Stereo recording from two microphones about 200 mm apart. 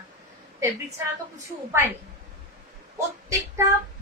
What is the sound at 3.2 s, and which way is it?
Speech, 15° right (ahead or behind).